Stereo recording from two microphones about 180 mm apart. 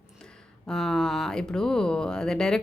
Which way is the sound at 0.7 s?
5° left (ahead or behind).